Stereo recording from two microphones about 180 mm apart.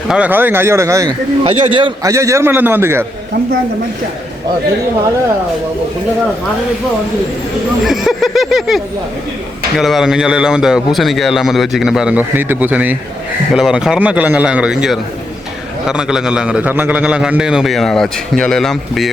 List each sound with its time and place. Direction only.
0.1 s speech: 10° right (ahead or behind)
1.5 s a man's voice: 30° right (ahead or behind)
2.1 s speech: 15° right (ahead or behind)
7.9 s a man's voice: centre (ahead or behind)